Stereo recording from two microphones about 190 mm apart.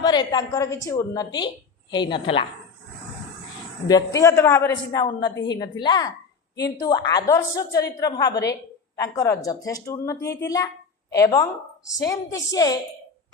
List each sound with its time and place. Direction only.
0.0 s a woman's voice: 20° left (ahead or behind)
3.8 s a woman's voice: 20° left (ahead or behind)